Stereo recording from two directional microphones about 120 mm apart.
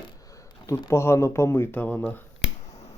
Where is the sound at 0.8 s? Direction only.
25° left (ahead or behind).